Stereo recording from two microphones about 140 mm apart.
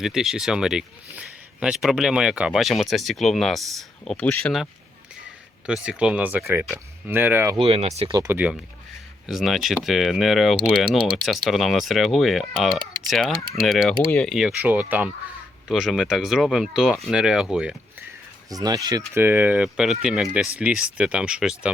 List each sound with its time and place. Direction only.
0.0 s speech: 5° right (ahead or behind)
5.6 s speech: 5° right (ahead or behind)
7.5 s speech: 45° right (ahead or behind)
8.1 s speech: 25° right (ahead or behind)
9.2 s speech: centre (ahead or behind)
14.3 s speech: 10° right (ahead or behind)
15.7 s speech: centre (ahead or behind)
18.5 s speech: 25° right (ahead or behind); by 21.7 s 5° right (ahead or behind)